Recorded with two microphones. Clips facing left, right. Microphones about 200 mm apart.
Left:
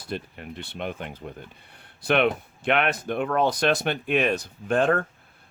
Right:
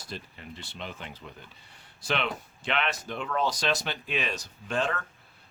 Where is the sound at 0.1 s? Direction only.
60° left (ahead or behind).